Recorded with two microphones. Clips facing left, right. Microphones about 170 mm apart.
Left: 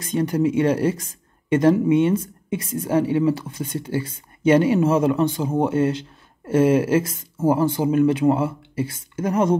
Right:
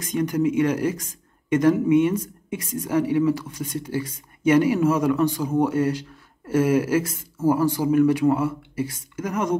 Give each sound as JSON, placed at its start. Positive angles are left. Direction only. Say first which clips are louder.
{"t": 0.0, "sound": "a woman's voice", "louder": "left 2 dB", "side_deg": 30}